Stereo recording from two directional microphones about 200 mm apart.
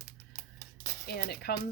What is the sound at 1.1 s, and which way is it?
Speech, 55° left (ahead or behind).